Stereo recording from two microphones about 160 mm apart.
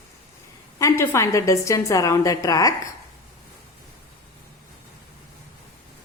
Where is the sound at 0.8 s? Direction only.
20° left (ahead or behind).